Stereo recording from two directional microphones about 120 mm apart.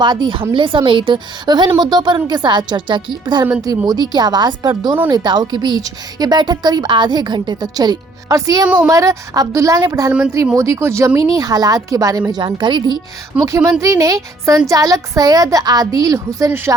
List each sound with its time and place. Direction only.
0.0 s a woman's voice: 40° right (ahead or behind)
8.6 s a woman's voice: 10° right (ahead or behind)
8.9 s a woman's voice: 30° right (ahead or behind)
12.5 s a woman's voice: 40° right (ahead or behind)
13.3 s a woman's voice: 10° right (ahead or behind)
13.8 s a woman's voice: 30° right (ahead or behind)